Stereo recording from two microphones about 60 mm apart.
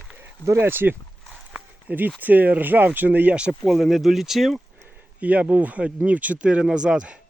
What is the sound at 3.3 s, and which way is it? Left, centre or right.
Speech, centre.